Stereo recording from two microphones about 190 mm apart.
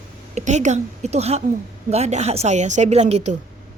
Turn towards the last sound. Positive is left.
turn(degrees=-35)  # may be behind; listen again after turning